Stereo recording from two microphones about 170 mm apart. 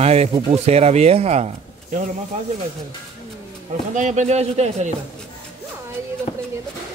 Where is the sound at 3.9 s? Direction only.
45° right (ahead or behind).